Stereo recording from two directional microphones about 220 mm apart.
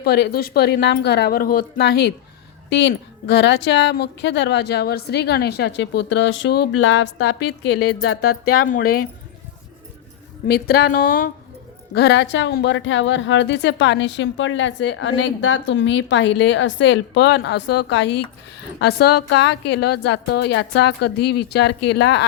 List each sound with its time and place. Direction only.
0.0 s a woman's voice: 45° left (ahead or behind)
10.4 s a woman's voice: 45° left (ahead or behind)
11.9 s a woman's voice: 50° left (ahead or behind)